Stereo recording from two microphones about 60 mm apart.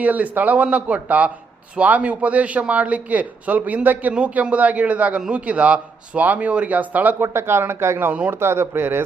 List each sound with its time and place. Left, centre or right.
0.0 s speech: right
7.2 s speech: right
8.1 s speech: right
8.4 s speech: right